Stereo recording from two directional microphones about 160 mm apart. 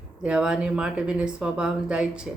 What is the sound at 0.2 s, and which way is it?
Speech, 5° right (ahead or behind).